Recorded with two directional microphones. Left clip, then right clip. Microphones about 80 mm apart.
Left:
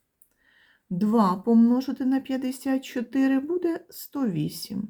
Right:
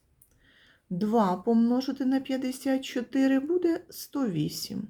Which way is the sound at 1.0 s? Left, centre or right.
Left.